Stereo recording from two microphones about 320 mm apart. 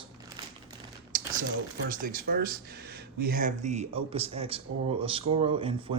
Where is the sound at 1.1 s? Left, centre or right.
Right.